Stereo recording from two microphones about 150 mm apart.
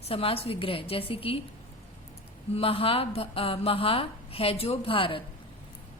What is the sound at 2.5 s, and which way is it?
A woman's voice, 40° left (ahead or behind).